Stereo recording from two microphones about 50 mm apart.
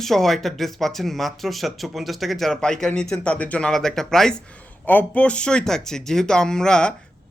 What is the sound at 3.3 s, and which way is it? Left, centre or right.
Speech, left.